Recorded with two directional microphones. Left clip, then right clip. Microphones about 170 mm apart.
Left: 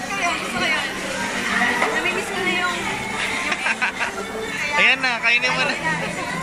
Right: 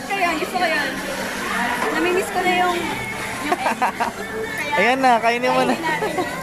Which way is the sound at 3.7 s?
35° right (ahead or behind).